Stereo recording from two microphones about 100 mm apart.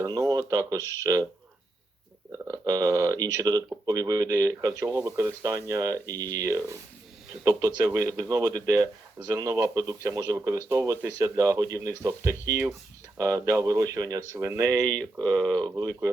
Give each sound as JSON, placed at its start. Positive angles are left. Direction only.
{"t": 0.0, "sound": "speech", "side_deg": -35}
{"t": 2.4, "sound": "speech", "side_deg": -35}
{"t": 7.9, "sound": "speech", "side_deg": -30}
{"t": 15.2, "sound": "speech", "side_deg": 10}
{"t": 15.7, "sound": "speech", "side_deg": -35}